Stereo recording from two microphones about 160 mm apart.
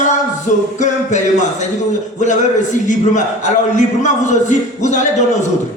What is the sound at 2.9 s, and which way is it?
Speech, 50° left (ahead or behind).